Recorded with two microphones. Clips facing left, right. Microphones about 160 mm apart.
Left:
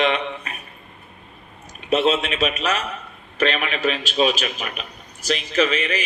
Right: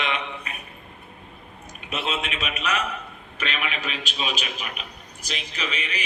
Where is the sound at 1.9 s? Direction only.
30° left (ahead or behind).